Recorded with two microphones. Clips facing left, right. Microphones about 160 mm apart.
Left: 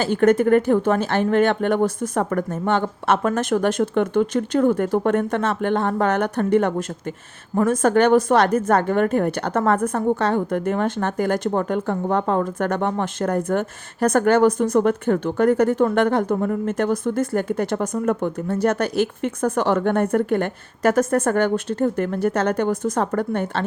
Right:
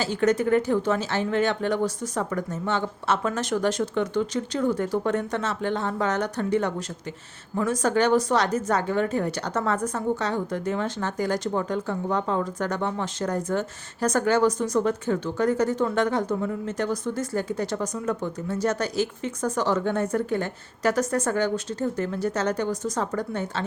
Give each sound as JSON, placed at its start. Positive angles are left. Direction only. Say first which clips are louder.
{"t": 0.0, "sound": "a woman's voice", "louder": "left 6 dB", "side_deg": 55}